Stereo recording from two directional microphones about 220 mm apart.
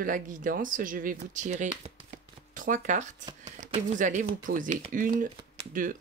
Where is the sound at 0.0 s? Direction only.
35° right (ahead or behind).